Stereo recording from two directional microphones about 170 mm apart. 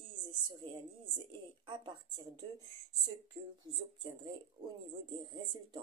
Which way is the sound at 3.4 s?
30° right (ahead or behind).